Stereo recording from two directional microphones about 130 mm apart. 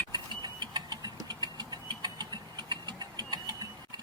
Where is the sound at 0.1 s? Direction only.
35° right (ahead or behind).